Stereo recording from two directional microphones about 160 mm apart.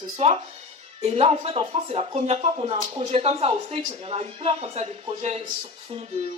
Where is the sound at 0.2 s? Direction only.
40° right (ahead or behind).